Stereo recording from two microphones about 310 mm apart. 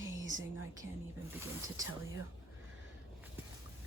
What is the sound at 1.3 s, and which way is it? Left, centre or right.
Speech, centre.